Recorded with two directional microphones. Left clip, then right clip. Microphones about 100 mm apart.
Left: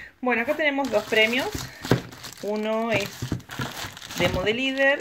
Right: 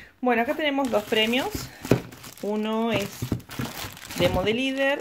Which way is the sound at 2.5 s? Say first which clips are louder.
Left 2 dB; 55° right (ahead or behind).